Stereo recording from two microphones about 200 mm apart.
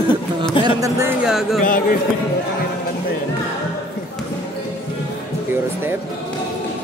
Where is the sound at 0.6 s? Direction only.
15° right (ahead or behind).